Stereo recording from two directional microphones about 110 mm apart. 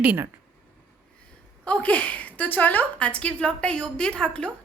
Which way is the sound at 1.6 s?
10° left (ahead or behind).